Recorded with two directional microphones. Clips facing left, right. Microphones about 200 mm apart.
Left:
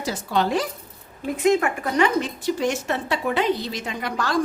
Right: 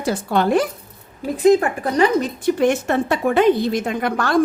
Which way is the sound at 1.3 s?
35° right (ahead or behind).